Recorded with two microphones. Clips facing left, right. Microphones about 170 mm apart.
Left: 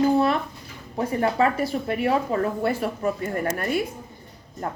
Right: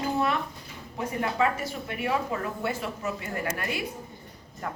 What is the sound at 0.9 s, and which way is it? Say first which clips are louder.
A woman's voice: left 6 dB; 35° left (ahead or behind).